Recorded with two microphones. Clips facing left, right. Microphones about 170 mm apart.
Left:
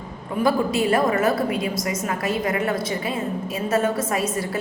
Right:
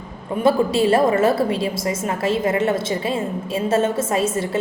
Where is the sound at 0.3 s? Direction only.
25° right (ahead or behind).